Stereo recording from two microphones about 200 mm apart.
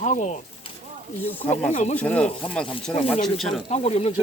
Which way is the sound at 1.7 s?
35° left (ahead or behind).